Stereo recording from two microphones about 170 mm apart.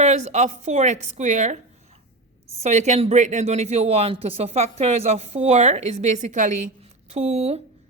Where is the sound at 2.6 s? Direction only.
45° right (ahead or behind).